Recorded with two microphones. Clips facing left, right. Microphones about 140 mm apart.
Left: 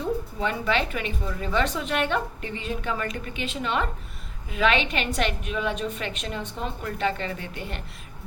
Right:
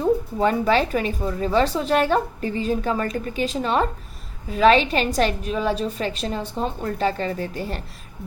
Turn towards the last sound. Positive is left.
turn(degrees=-35)  # may be behind; listen again after turning